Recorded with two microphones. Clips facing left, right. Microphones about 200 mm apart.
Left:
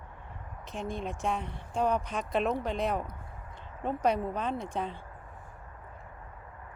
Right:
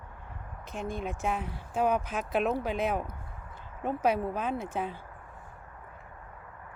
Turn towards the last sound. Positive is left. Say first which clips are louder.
# right 1 dB
turn(degrees=-5)  # may be behind; listen again after turning